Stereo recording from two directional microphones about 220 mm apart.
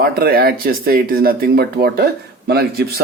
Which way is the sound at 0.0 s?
45° right (ahead or behind).